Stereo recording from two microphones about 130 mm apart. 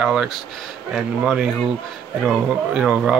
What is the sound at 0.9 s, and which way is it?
Speech, 5° right (ahead or behind).